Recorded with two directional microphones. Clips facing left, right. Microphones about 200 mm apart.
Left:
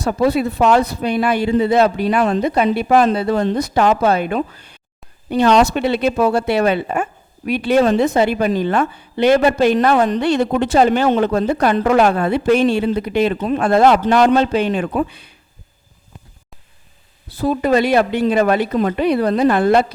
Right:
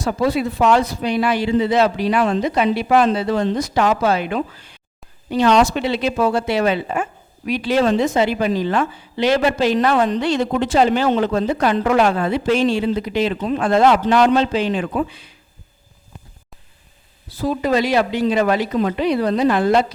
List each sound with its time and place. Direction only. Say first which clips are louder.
0.1 s a woman's voice: left 3 dB; 55° left (ahead or behind)
17.2 s a woman's voice: left 3 dB; 60° left (ahead or behind)